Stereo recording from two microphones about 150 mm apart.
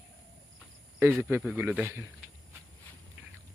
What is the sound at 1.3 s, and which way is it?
Speech, 10° right (ahead or behind).